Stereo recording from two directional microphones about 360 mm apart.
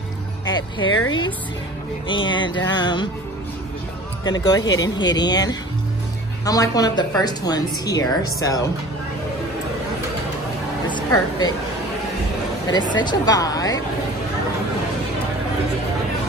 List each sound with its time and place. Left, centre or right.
0.8 s a woman's voice: left
2.0 s a woman's voice: centre
4.2 s a woman's voice: centre
10.9 s speech: centre
12.7 s a woman's voice: centre